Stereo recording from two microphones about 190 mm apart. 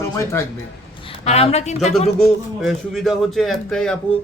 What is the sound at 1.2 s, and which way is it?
Speech, 35° left (ahead or behind).